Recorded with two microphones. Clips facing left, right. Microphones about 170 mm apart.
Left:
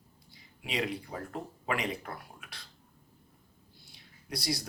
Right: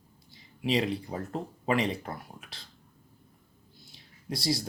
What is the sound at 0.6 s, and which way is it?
Speech, 25° right (ahead or behind).